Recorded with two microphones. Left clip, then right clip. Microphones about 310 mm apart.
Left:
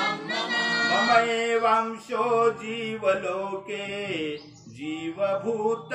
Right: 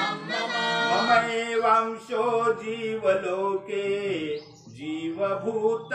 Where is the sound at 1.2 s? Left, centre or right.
Centre.